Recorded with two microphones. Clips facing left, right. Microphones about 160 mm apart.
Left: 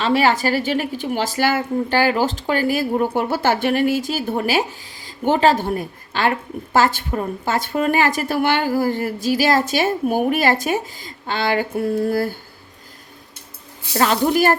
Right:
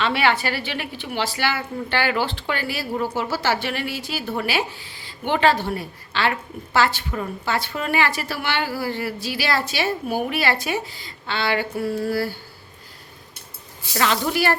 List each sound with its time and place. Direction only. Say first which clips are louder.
0.0 s a woman's voice: left 4 dB; 40° left (ahead or behind)
13.9 s a woman's voice: left 5 dB; 35° left (ahead or behind)